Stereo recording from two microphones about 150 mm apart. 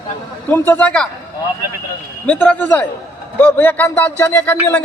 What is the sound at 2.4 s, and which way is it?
A man's voice, 10° left (ahead or behind).